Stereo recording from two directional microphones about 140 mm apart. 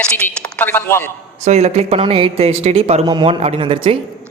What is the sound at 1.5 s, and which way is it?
A man's voice, 50° right (ahead or behind).